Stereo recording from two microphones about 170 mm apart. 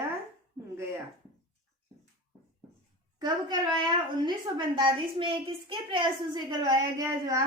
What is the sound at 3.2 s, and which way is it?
A woman's voice, 25° right (ahead or behind).